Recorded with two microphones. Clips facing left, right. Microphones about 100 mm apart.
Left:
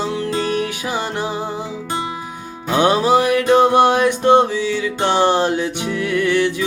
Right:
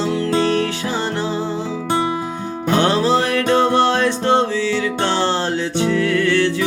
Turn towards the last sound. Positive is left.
turn(degrees=15)  # may be behind; listen again after turning